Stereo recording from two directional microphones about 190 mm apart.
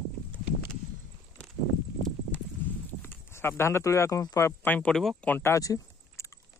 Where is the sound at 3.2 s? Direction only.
15° left (ahead or behind).